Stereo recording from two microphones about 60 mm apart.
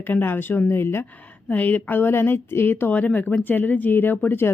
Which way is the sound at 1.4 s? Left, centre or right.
Left.